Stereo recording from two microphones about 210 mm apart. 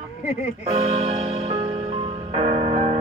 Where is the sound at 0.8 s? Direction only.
30° right (ahead or behind).